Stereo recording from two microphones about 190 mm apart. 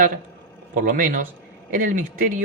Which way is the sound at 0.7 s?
45° right (ahead or behind).